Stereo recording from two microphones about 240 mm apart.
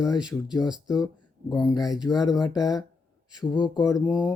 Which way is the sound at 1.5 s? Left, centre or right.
Centre.